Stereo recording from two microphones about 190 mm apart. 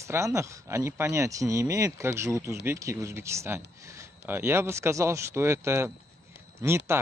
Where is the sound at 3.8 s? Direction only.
15° right (ahead or behind).